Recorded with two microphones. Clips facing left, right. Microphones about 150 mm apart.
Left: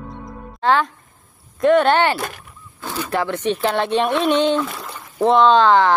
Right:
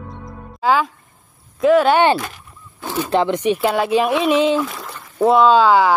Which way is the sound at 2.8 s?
20° right (ahead or behind).